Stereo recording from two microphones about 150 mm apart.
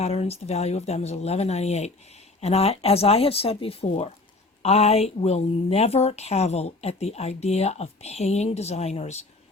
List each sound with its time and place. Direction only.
0.0 s a woman's voice: 40° left (ahead or behind)